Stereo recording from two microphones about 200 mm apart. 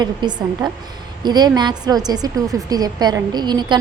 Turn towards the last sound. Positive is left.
turn(degrees=-20)  # may be behind; listen again after turning